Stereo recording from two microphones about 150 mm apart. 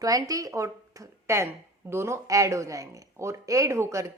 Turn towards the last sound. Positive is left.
turn(degrees=-20)  # may be behind; listen again after turning